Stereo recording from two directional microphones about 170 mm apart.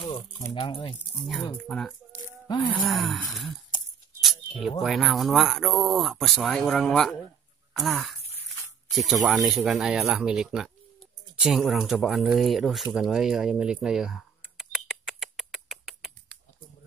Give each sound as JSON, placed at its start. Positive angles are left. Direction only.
{"t": 0.0, "sound": "music", "side_deg": 25}
{"t": 0.6, "sound": "speech", "side_deg": 30}
{"t": 1.6, "sound": "speech", "side_deg": 5}
{"t": 4.2, "sound": "a sound", "side_deg": 0}
{"t": 4.8, "sound": "speech", "side_deg": 0}
{"t": 12.9, "sound": "a sound", "side_deg": 0}